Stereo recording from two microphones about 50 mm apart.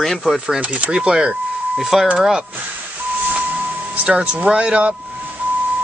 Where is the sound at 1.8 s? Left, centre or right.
Centre.